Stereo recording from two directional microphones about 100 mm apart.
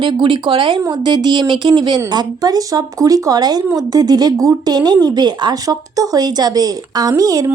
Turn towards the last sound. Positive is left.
turn(degrees=-35)  # may be behind; listen again after turning